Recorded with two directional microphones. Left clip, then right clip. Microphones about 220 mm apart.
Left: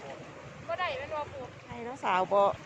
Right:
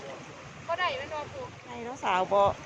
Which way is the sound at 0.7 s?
40° right (ahead or behind).